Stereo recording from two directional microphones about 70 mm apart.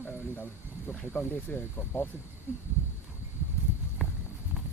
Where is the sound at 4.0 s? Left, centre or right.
Centre.